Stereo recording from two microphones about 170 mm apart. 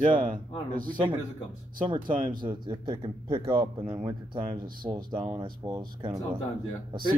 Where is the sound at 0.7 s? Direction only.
55° right (ahead or behind).